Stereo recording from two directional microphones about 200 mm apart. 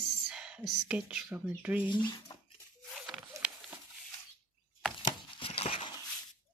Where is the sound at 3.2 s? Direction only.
5° right (ahead or behind).